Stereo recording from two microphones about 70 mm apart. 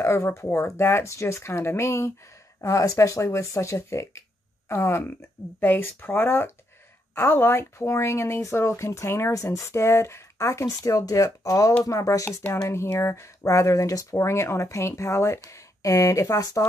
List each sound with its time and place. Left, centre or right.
0.0 s speech: left
2.6 s speech: left
10.8 s speech: left
12.6 s speech: left